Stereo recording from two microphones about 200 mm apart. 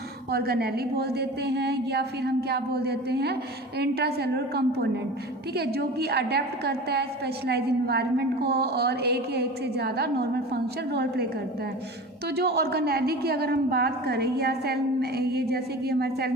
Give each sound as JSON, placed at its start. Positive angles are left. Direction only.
{"t": 0.3, "sound": "a woman's voice", "side_deg": -50}
{"t": 12.4, "sound": "a woman's voice", "side_deg": -55}